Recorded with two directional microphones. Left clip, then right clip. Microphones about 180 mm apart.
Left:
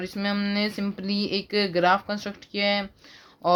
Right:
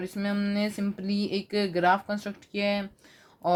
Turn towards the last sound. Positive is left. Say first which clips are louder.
# left 3 dB
turn(degrees=25)  # may be behind; listen again after turning